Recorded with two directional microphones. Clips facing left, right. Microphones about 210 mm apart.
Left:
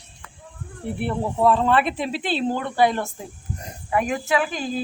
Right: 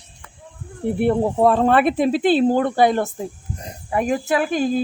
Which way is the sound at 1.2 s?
40° right (ahead or behind).